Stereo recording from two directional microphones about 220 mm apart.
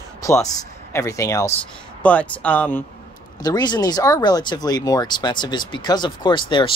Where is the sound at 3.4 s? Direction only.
20° left (ahead or behind).